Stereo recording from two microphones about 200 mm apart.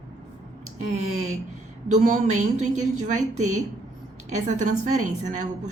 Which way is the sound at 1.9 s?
40° right (ahead or behind).